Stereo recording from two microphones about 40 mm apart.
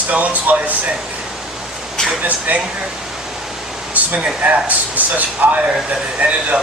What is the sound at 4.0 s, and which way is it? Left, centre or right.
Speech, right.